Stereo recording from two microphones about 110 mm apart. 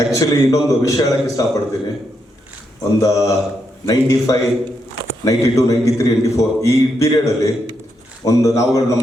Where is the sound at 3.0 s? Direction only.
30° left (ahead or behind).